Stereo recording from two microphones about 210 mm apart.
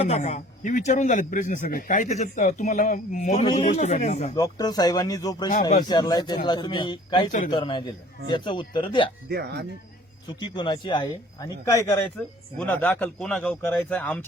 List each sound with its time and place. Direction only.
0.0 s a man's voice: 30° left (ahead or behind)
4.4 s a man's voice: 15° left (ahead or behind)
7.3 s a man's voice: 40° left (ahead or behind)
7.5 s a man's voice: 20° left (ahead or behind)
9.3 s speech: 50° right (ahead or behind)
10.2 s a man's voice: 20° left (ahead or behind); by 14.2 s 5° left (ahead or behind)